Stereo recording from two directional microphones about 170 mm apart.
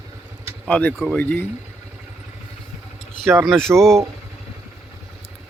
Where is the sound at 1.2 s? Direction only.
10° left (ahead or behind).